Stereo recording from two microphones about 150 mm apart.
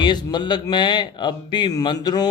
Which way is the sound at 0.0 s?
30° left (ahead or behind).